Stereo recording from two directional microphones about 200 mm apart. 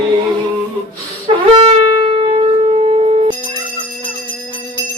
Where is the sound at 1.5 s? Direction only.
30° right (ahead or behind).